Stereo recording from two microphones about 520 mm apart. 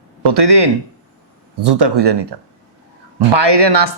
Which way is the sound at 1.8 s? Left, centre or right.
Right.